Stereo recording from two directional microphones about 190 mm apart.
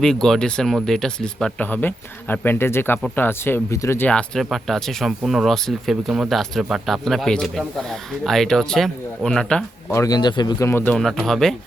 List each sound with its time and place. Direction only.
0.0 s speech: 5° left (ahead or behind)
9.9 s speech: 20° left (ahead or behind)
10.9 s speech: centre (ahead or behind)